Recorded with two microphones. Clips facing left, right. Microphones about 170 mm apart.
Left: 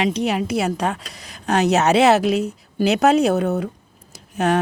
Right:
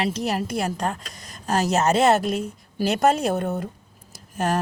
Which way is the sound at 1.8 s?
70° left (ahead or behind).